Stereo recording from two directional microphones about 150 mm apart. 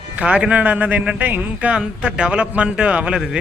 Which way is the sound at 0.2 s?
5° right (ahead or behind).